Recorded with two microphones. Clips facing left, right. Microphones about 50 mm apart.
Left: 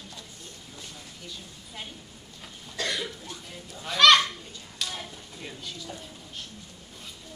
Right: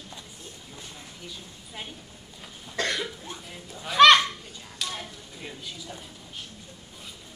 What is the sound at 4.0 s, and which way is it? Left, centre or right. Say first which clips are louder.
Goose: right 3 dB; right.